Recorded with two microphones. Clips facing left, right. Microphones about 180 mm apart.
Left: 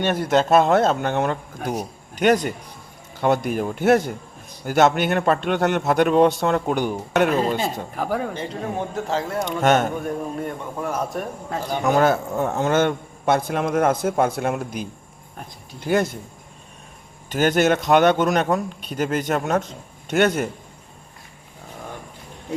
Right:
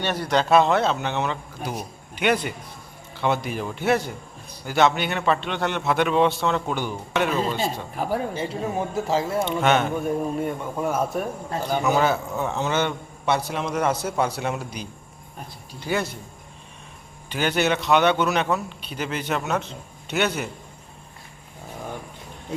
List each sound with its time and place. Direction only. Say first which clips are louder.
0.0 s a man's voice: left 4 dB; 50° left (ahead or behind)
8.3 s a man's voice: right 1 dB; 5° right (ahead or behind)
9.4 s a man's voice: left 5 dB; 45° left (ahead or behind)
10.0 s a man's voice: right 2 dB; 5° right (ahead or behind)
11.9 s a man's voice: left 4 dB; 50° left (ahead or behind)
17.2 s a man's voice: left 5 dB; 45° left (ahead or behind)